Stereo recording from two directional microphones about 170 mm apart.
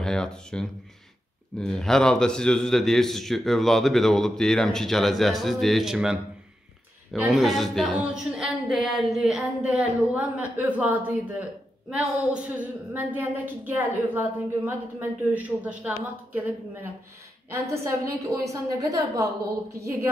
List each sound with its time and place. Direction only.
0.0 s speech: 5° left (ahead or behind)
7.2 s a woman's voice: 5° right (ahead or behind)
17.5 s a woman's voice: 15° right (ahead or behind)